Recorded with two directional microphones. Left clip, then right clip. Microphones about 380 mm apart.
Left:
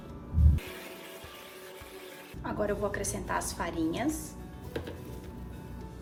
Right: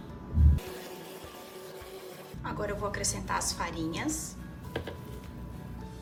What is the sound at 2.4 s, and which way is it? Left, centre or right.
A woman's voice, centre.